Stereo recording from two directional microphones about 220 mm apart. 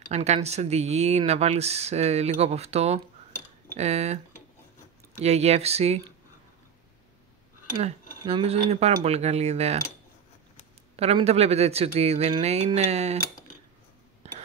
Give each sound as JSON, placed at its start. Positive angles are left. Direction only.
{"t": 0.0, "sound": "speech", "side_deg": -30}
{"t": 5.2, "sound": "speech", "side_deg": -30}
{"t": 7.7, "sound": "speech", "side_deg": -25}
{"t": 11.0, "sound": "speech", "side_deg": -30}